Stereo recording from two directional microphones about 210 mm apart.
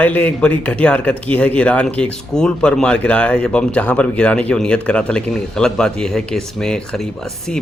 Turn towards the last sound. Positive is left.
turn(degrees=5)  # may be behind; listen again after turning